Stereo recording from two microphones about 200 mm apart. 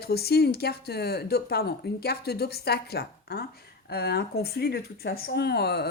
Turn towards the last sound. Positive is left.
turn(degrees=55)  # may be behind; listen again after turning